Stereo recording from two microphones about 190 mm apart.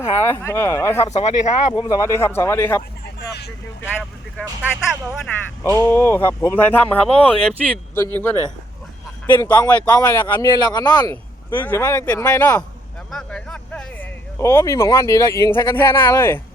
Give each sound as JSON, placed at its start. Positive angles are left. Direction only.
{"t": 0.3, "sound": "speech", "side_deg": 15}
{"t": 1.1, "sound": "speech", "side_deg": 35}
{"t": 1.7, "sound": "speech", "side_deg": 20}
{"t": 3.2, "sound": "vehicle", "side_deg": 60}
{"t": 4.6, "sound": "speech", "side_deg": 0}
{"t": 5.6, "sound": "speech", "side_deg": 15}